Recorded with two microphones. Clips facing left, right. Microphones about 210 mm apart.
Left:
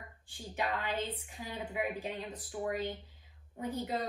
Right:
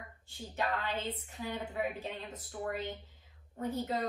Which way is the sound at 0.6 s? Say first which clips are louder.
Even; 10° left (ahead or behind).